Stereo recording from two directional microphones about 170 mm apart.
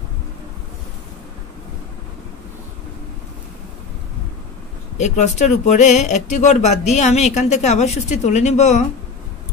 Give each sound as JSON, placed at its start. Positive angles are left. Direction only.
{"t": 4.9, "sound": "speech", "side_deg": 45}